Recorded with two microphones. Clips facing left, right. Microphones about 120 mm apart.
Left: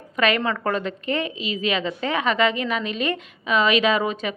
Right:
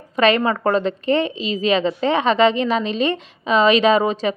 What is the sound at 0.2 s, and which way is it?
A woman's voice, 30° right (ahead or behind).